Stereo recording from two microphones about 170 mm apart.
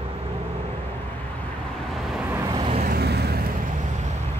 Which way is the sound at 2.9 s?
70° right (ahead or behind).